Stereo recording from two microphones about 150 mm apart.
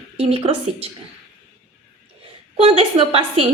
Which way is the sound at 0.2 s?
40° right (ahead or behind).